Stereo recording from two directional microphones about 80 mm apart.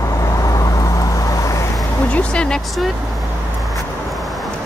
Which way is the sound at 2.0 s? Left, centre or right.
Centre.